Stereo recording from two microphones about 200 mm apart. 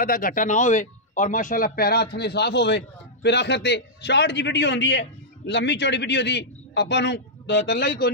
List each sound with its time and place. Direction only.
0.0 s a man's voice: 45° left (ahead or behind)